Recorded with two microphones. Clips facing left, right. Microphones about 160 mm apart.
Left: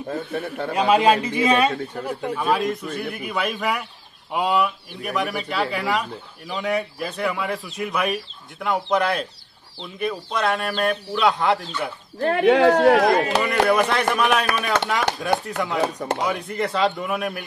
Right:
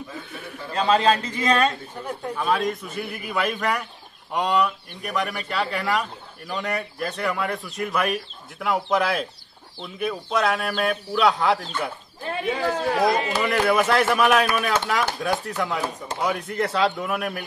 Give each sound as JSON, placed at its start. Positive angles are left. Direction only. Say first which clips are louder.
{"t": 0.1, "sound": "speech", "louder": "left 9 dB", "side_deg": 60}
{"t": 0.7, "sound": "speech", "louder": "left 2 dB", "side_deg": 10}
{"t": 12.2, "sound": "speech", "louder": "left 10 dB", "side_deg": 65}
{"t": 13.4, "sound": "speech", "louder": "left 2 dB", "side_deg": 0}
{"t": 15.8, "sound": "speech", "louder": "left 6 dB", "side_deg": 65}
{"t": 16.3, "sound": "speech", "louder": "even", "side_deg": 0}